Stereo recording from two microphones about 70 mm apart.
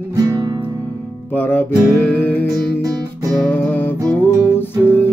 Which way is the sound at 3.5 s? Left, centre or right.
Left.